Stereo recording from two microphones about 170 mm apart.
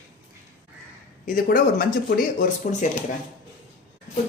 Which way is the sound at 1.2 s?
55° left (ahead or behind).